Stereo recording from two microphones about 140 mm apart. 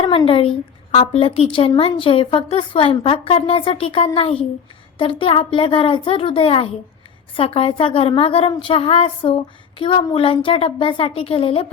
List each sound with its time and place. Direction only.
0.3 s a woman's voice: 40° left (ahead or behind)